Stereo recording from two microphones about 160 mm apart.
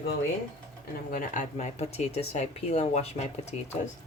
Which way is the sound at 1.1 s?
50° left (ahead or behind).